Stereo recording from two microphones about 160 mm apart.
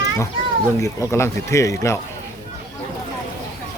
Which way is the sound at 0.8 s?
20° left (ahead or behind).